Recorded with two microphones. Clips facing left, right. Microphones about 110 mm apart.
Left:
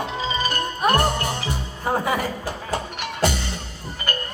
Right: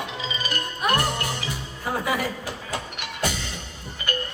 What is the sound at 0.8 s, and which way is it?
Music, 35° left (ahead or behind).